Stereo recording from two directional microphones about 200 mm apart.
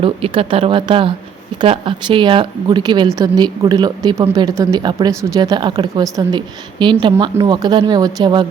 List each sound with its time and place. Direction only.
0.0 s speech: 25° right (ahead or behind)